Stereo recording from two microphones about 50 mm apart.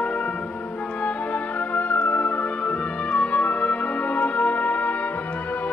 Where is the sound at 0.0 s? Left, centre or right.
Left.